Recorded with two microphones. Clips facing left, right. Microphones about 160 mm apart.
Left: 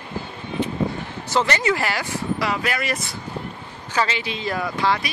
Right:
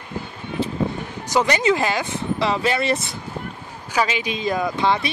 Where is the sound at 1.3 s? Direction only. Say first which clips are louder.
Right 2 dB; 15° right (ahead or behind).